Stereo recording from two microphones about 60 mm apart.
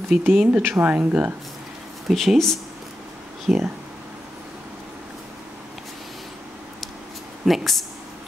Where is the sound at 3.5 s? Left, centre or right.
Centre.